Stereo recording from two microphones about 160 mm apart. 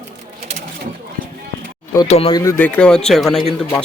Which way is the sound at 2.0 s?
40° left (ahead or behind).